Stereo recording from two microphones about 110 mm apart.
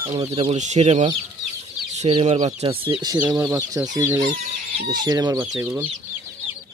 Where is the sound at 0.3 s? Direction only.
75° right (ahead or behind).